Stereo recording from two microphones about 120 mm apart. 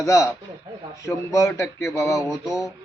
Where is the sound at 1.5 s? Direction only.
20° left (ahead or behind).